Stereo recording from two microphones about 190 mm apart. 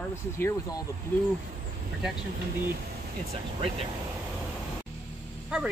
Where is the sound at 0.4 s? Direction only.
15° left (ahead or behind).